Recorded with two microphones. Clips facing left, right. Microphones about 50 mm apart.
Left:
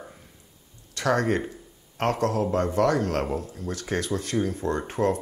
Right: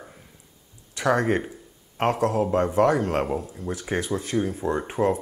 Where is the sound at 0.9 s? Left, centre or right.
Centre.